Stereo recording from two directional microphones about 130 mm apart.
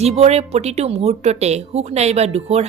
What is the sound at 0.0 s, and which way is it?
Speech, 55° right (ahead or behind).